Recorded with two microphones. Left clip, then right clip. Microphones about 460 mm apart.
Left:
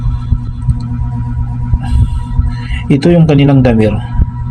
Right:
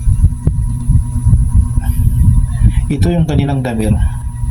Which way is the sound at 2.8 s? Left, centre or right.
Right.